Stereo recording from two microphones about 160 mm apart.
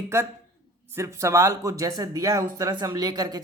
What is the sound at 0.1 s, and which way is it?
A man's voice, 15° right (ahead or behind).